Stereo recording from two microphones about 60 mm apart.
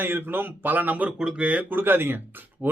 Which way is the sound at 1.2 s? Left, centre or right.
Centre.